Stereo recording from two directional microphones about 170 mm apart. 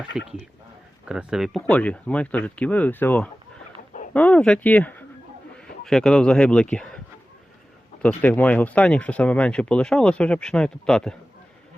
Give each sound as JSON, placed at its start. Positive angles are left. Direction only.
{"t": 0.1, "sound": "speech", "side_deg": -5}
{"t": 8.0, "sound": "speech", "side_deg": 10}